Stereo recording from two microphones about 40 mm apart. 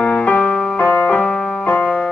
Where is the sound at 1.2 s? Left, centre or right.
Centre.